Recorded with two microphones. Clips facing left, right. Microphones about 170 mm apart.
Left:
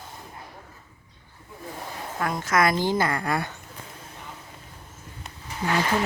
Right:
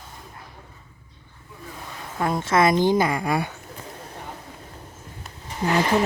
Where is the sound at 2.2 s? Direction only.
25° right (ahead or behind).